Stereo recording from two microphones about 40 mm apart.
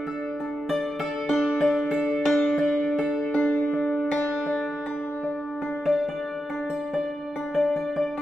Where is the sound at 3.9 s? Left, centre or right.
Left.